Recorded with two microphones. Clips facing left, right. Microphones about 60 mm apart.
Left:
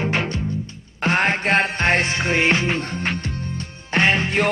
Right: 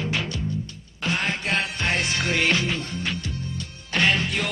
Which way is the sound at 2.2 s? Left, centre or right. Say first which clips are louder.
Left 4 dB; left.